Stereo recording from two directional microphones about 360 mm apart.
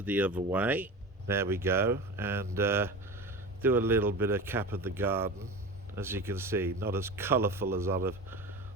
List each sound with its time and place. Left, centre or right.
0.0 s speech: centre